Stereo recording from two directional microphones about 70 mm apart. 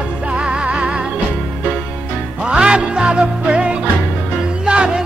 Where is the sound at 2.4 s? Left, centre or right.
Centre.